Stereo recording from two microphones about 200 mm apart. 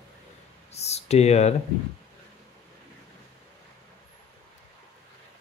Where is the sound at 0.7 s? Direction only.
30° left (ahead or behind).